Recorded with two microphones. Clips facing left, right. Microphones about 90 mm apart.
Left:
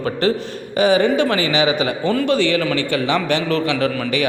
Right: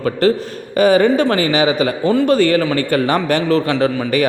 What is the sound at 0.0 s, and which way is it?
Speech, 40° right (ahead or behind).